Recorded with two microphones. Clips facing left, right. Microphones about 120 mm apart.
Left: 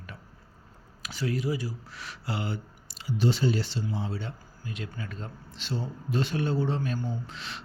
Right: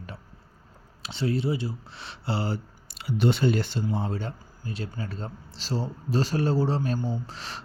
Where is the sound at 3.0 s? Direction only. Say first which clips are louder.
Right 3 dB; 60° right (ahead or behind).